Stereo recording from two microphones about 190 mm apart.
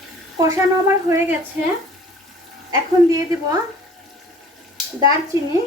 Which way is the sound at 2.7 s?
20° right (ahead or behind).